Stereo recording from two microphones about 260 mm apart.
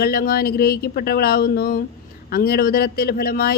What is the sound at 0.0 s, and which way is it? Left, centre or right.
Speech, left.